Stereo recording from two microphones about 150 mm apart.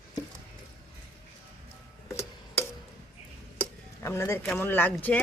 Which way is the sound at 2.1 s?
20° left (ahead or behind).